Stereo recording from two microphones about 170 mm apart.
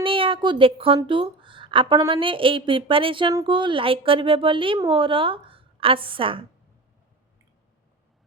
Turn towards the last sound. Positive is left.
turn(degrees=-30)  # may be behind; listen again after turning